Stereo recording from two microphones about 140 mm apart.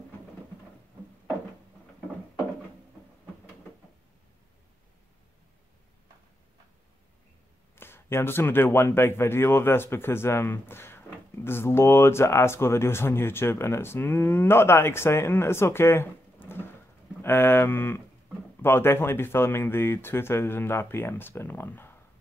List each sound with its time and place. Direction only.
7.7 s speech: 15° left (ahead or behind)